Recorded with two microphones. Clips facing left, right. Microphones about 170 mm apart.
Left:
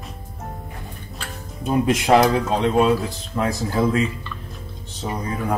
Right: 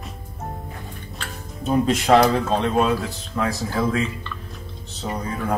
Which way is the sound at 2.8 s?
20° left (ahead or behind).